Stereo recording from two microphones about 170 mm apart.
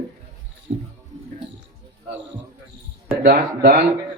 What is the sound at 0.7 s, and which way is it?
Music, 50° right (ahead or behind).